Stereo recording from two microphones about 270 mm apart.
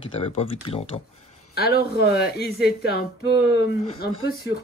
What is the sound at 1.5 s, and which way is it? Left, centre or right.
Speech, left.